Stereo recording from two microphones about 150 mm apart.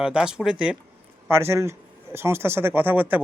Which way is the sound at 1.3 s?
15° right (ahead or behind).